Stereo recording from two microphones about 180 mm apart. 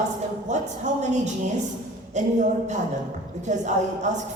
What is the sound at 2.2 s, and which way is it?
Speech, 40° right (ahead or behind).